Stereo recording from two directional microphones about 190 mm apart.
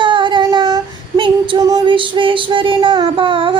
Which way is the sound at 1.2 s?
25° right (ahead or behind).